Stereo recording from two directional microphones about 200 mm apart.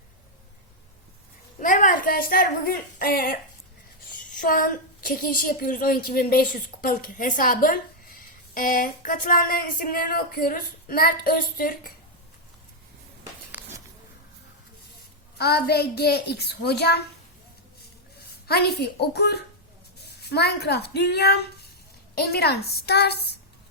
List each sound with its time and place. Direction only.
1.5 s a woman's voice: 40° left (ahead or behind)
13.5 s a sound: 10° right (ahead or behind)
15.4 s a woman's voice: 55° left (ahead or behind)
18.2 s a child's voice: 50° left (ahead or behind)